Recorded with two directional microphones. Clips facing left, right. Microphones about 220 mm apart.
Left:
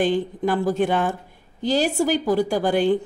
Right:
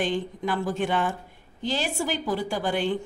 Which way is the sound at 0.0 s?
40° left (ahead or behind).